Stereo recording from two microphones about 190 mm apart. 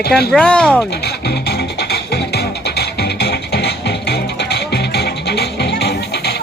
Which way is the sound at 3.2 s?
60° left (ahead or behind).